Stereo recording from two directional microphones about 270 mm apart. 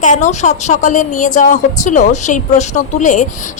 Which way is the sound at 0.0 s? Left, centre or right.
Left.